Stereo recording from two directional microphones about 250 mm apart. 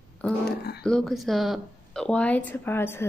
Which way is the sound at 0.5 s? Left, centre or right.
Left.